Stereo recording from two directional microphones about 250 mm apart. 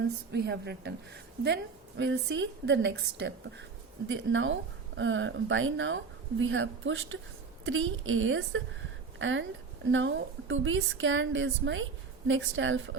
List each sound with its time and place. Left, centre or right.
0.3 s a woman's voice: right
2.0 s a woman's voice: right